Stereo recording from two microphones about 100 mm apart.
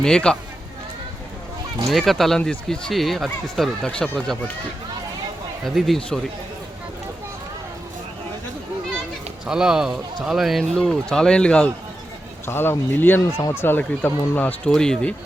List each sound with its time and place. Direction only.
0.0 s speech: 5° left (ahead or behind)
1.9 s speech: centre (ahead or behind)
5.6 s speech: centre (ahead or behind)
9.5 s speech: 5° right (ahead or behind); by 11.7 s 10° left (ahead or behind)
12.5 s speech: 20° left (ahead or behind); by 15.1 s 5° left (ahead or behind)